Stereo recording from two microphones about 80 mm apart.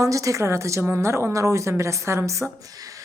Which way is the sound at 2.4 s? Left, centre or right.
Centre.